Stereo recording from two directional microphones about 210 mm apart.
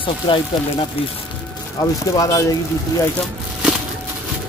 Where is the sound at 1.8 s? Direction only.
15° left (ahead or behind).